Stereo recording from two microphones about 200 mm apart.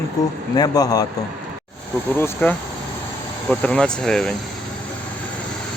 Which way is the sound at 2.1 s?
10° left (ahead or behind).